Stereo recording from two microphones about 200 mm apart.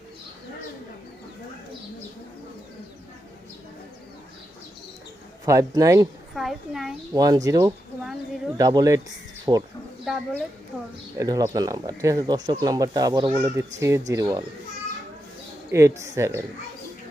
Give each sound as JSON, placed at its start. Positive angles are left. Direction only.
{"t": 5.5, "sound": "speech", "side_deg": -15}
{"t": 6.3, "sound": "a child's voice", "side_deg": 0}
{"t": 7.1, "sound": "speech", "side_deg": -20}
{"t": 10.0, "sound": "speech", "side_deg": 0}
{"t": 11.2, "sound": "speech", "side_deg": -15}
{"t": 15.7, "sound": "speech", "side_deg": -15}